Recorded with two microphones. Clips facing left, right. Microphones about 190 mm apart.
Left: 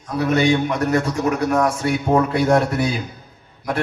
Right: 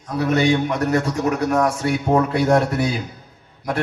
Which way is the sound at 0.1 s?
40° right (ahead or behind).